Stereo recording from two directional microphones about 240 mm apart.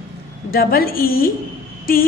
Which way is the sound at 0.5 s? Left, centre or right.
Left.